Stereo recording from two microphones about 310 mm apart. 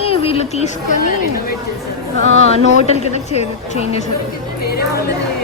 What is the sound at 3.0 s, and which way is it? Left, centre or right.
A woman's voice, left.